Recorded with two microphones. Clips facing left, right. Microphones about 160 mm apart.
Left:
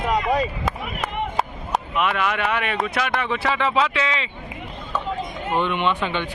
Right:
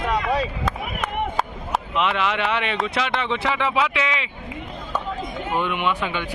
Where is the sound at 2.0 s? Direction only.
20° right (ahead or behind).